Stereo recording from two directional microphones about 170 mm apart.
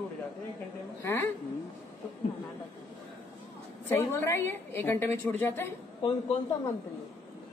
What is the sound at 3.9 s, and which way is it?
A man's voice, 15° left (ahead or behind).